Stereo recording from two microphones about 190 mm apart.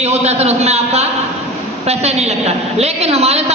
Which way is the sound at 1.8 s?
35° right (ahead or behind).